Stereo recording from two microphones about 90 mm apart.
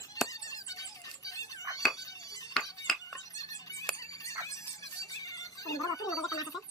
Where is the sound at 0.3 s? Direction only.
40° left (ahead or behind).